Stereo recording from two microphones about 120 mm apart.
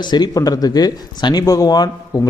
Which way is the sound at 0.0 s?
35° left (ahead or behind).